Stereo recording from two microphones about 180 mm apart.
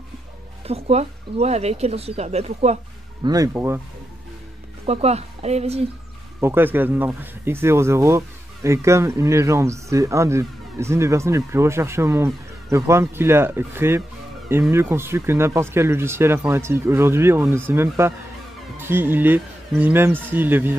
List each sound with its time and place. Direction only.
0.7 s speech: 35° right (ahead or behind)
3.3 s speech: 15° right (ahead or behind)
4.8 s speech: 35° right (ahead or behind)
6.4 s speech: 10° right (ahead or behind)